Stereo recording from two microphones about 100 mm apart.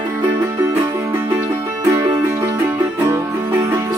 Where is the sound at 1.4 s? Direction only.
30° right (ahead or behind).